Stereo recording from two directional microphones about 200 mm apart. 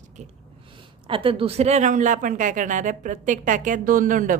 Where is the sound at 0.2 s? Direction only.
35° right (ahead or behind).